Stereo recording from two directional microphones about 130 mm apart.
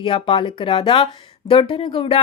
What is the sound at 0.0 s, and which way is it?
Speech, 40° left (ahead or behind).